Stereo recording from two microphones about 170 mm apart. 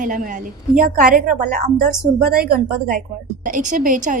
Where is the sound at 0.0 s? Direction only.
50° right (ahead or behind).